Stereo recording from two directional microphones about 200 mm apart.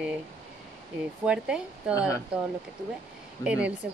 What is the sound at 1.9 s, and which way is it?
Speech, 15° left (ahead or behind).